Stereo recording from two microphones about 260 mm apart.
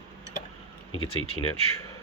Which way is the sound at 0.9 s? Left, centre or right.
Left.